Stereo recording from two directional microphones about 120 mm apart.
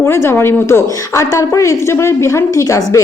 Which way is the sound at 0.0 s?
20° left (ahead or behind).